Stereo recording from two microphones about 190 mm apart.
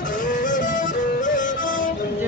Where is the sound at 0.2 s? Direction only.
45° left (ahead or behind).